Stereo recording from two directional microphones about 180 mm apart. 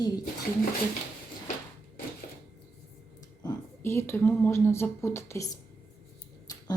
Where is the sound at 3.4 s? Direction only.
15° left (ahead or behind).